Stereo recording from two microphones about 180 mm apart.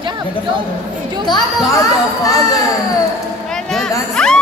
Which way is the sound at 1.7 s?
20° left (ahead or behind).